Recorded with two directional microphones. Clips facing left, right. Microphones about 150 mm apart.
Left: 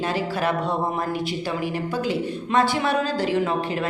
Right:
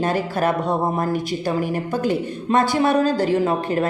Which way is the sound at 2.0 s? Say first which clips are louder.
Right 4 dB; 45° right (ahead or behind).